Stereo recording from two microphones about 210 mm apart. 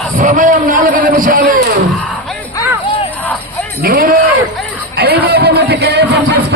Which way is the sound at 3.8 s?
45° right (ahead or behind).